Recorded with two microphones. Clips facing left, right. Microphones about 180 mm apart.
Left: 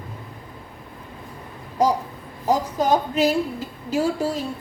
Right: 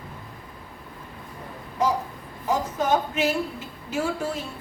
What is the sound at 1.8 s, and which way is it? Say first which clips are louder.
A woman's voice: left 4 dB; 35° left (ahead or behind).